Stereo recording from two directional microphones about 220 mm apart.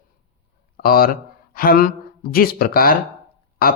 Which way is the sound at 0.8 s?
45° left (ahead or behind).